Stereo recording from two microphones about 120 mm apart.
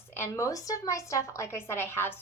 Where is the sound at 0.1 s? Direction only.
20° left (ahead or behind).